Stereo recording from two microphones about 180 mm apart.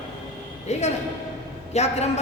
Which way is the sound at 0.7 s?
40° left (ahead or behind).